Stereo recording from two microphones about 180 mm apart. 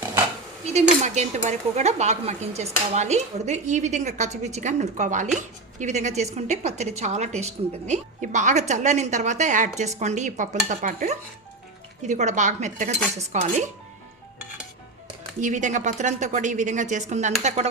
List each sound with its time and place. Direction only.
0.7 s speech: 40° right (ahead or behind)
15.4 s a woman's voice: 45° right (ahead or behind)